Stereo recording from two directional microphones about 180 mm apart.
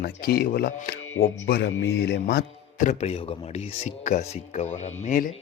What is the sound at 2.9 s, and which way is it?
Speech, 35° left (ahead or behind).